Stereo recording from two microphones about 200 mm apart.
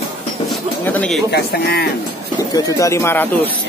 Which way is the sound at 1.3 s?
55° left (ahead or behind).